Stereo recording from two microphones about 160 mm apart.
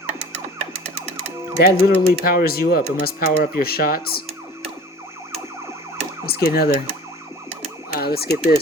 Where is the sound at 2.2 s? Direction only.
70° left (ahead or behind).